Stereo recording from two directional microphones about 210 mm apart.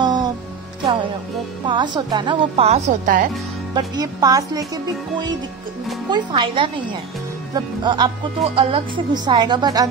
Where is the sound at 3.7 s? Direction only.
20° right (ahead or behind).